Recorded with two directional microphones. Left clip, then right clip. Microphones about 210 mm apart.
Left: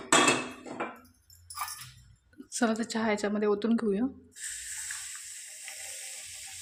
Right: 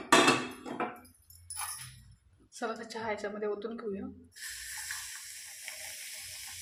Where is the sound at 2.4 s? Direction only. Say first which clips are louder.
Left 7 dB; 55° left (ahead or behind).